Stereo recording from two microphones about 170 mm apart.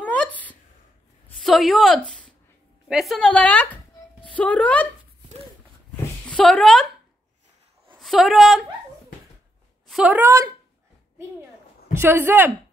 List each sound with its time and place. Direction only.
0.0 s a sound: 10° left (ahead or behind)
1.4 s a woman's voice: centre (ahead or behind)
6.2 s speech: 5° left (ahead or behind)
8.0 s a woman's voice: centre (ahead or behind)
9.8 s a woman's voice: centre (ahead or behind)
10.2 s speech: 20° right (ahead or behind)
11.9 s speech: 15° right (ahead or behind)